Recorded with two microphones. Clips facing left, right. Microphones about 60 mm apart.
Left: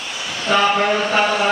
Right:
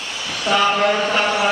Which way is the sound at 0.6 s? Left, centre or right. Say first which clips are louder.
Right 2 dB; centre.